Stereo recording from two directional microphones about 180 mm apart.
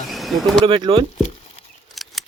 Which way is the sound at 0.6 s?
30° right (ahead or behind).